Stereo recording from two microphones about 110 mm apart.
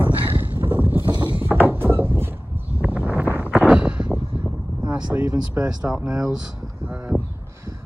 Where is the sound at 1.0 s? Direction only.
20° right (ahead or behind).